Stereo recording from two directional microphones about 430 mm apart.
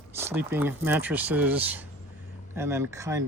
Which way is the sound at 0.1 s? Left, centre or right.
Centre.